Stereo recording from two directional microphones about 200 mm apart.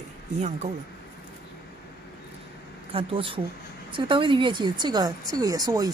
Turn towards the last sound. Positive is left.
turn(degrees=-20)  # may be behind; listen again after turning